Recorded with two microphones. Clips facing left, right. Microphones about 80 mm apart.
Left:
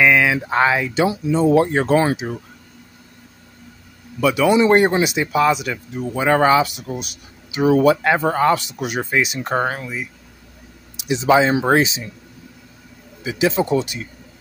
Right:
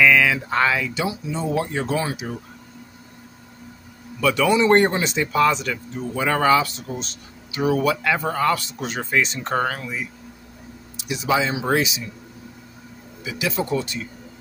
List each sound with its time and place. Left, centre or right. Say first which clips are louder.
0.0 s a sound: left 1 dB; left
1.3 s speech: left 11 dB; left
4.2 s speech: left 3 dB; centre
7.6 s speech: left 6 dB; left; by 9.6 s centre
9.6 s speech: left 2 dB; left
11.0 s speech: left 7 dB; left
13.2 s speech: left 7 dB; left